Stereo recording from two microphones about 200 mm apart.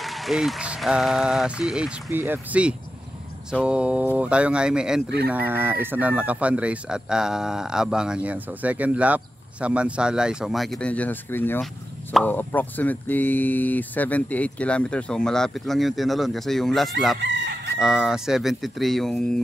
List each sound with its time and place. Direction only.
0.0 s chicken: centre (ahead or behind)
17.2 s chicken: 60° right (ahead or behind)
17.7 s chicken: 5° right (ahead or behind)